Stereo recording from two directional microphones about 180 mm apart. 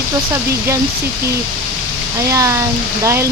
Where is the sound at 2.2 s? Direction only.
15° right (ahead or behind).